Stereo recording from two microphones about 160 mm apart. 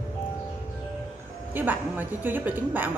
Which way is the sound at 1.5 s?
10° right (ahead or behind).